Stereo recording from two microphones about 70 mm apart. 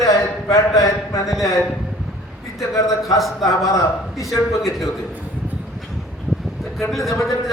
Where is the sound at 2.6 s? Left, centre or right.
Left.